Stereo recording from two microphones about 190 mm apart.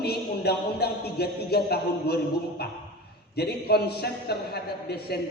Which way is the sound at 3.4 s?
55° left (ahead or behind).